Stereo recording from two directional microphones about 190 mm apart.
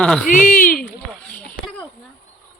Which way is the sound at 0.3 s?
45° left (ahead or behind).